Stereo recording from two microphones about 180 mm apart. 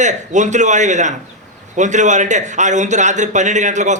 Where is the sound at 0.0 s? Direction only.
40° right (ahead or behind).